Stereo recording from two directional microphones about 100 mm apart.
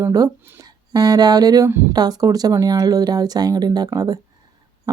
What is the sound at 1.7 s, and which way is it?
Speech, 25° right (ahead or behind).